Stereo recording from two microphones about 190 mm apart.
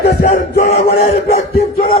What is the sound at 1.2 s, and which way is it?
Music, 35° left (ahead or behind).